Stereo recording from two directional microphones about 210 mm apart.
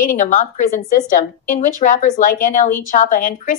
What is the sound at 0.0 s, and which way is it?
A woman's voice, 35° left (ahead or behind).